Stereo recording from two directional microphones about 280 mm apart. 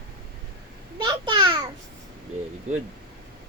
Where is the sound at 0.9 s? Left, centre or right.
Centre.